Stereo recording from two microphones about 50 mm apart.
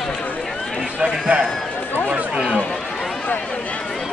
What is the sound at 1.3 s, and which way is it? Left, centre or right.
Speech, right.